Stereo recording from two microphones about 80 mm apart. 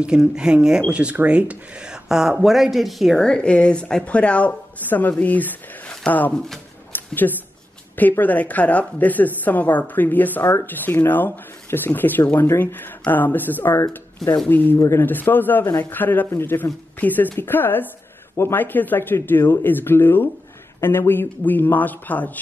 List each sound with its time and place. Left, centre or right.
0.0 s speech: centre
3.2 s speech: centre
6.9 s a sound: left
8.2 s speech: centre
14.8 s speech: left
15.0 s speech: left